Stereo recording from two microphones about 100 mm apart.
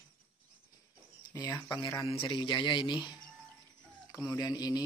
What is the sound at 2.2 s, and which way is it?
Speech, 50° left (ahead or behind).